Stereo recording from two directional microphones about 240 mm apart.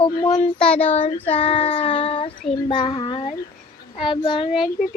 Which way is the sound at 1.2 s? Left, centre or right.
Left.